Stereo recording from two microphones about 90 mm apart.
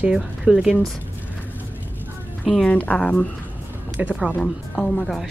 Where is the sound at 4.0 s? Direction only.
15° right (ahead or behind).